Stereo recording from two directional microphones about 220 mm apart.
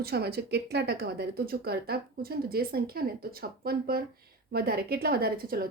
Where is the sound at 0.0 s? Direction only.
45° right (ahead or behind).